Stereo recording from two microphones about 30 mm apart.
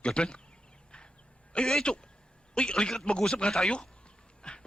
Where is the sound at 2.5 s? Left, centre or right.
Left.